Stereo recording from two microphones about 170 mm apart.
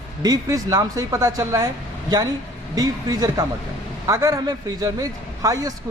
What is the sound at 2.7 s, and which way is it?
Speech, 20° right (ahead or behind).